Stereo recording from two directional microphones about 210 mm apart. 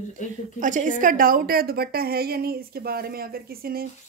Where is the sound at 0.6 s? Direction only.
40° right (ahead or behind).